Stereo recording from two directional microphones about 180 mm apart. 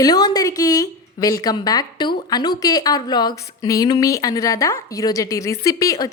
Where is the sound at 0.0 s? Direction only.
20° left (ahead or behind).